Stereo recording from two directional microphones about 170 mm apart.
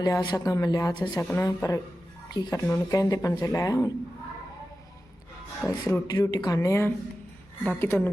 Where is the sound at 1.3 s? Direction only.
15° left (ahead or behind).